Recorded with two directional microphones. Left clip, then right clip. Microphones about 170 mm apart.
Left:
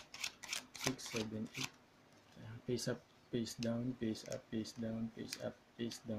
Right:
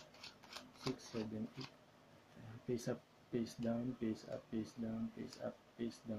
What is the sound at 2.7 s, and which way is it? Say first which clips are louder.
Speech: left 2 dB; 15° left (ahead or behind).